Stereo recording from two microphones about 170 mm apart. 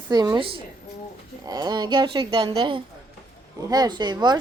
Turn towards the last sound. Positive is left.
turn(degrees=-25)  # may be behind; listen again after turning